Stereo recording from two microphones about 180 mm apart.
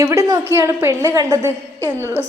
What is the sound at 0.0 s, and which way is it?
A woman's voice, 15° right (ahead or behind).